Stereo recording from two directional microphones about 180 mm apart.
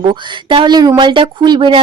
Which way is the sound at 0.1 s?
25° right (ahead or behind).